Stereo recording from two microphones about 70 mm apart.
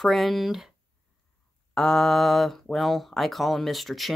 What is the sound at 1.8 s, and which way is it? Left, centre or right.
Speech, centre.